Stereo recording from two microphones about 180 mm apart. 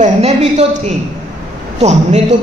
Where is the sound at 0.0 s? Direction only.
35° right (ahead or behind).